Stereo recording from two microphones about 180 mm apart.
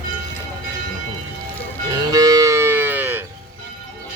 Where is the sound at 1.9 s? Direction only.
20° right (ahead or behind).